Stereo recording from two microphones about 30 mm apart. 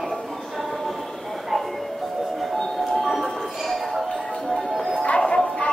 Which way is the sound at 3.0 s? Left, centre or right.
Centre.